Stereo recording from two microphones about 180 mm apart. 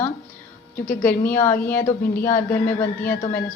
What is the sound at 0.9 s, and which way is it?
A woman's voice, 10° left (ahead or behind).